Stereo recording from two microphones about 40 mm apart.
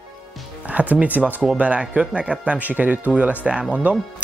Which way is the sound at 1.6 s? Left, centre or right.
Right.